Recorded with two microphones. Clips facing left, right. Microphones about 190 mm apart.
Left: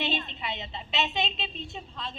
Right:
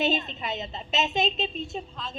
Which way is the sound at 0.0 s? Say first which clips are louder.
Right 5 dB; 45° right (ahead or behind).